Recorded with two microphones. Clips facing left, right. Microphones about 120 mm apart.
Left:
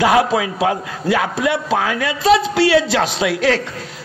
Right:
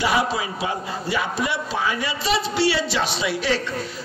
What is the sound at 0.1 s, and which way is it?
A man's voice, 90° left.